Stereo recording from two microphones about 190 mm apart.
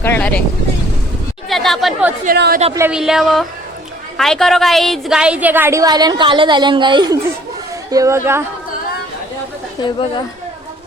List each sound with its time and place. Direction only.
0.0 s speech: 10° left (ahead or behind)
1.5 s chatter: centre (ahead or behind)
2.2 s a woman's voice: 50° right (ahead or behind)
2.7 s a woman's voice: 10° right (ahead or behind)